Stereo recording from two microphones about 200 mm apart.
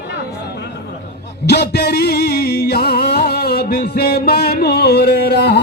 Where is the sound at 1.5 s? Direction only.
50° left (ahead or behind).